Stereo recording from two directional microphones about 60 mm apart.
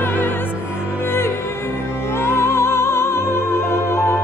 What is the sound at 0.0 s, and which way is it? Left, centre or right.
Music, left.